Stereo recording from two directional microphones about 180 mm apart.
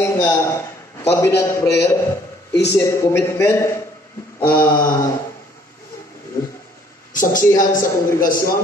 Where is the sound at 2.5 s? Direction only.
70° left (ahead or behind).